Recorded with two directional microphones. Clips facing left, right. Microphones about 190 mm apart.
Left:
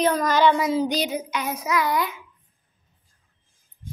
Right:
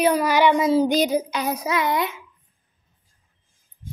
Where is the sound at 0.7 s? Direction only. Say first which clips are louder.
Right 5 dB; 45° right (ahead or behind).